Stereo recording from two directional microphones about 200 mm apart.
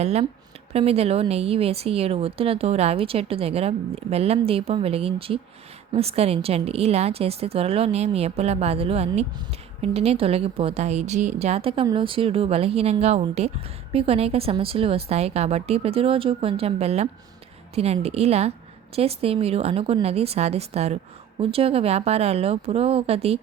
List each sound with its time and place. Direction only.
0.0 s speech: 35° right (ahead or behind)